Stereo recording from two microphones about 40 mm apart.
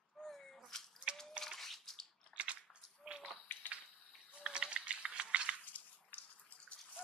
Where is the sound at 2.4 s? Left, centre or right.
Right.